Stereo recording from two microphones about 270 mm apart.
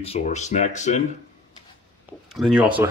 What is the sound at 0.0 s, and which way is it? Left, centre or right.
Speech, left.